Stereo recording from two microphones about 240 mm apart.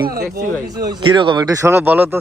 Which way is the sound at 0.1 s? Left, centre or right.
Right.